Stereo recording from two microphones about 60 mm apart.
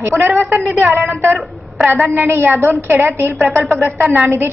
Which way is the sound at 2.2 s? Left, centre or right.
Right.